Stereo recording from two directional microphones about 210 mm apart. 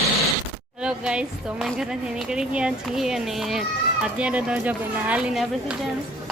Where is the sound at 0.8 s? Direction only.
5° right (ahead or behind).